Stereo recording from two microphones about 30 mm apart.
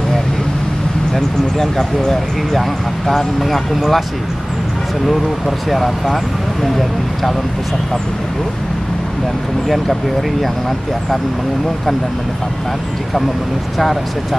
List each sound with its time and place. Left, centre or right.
1.1 s speech: centre
3.1 s speech: centre
5.7 s speech: centre